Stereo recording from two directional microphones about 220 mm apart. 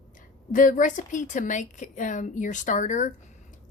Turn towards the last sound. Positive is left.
turn(degrees=35)  # may be behind; listen again after turning